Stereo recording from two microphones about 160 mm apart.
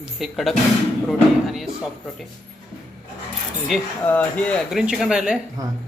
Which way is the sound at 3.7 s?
Centre (ahead or behind).